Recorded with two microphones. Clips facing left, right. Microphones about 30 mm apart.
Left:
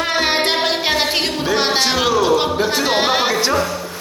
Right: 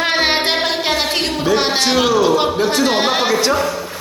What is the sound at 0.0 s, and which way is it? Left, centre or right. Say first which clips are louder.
Child singing: right 2 dB; right.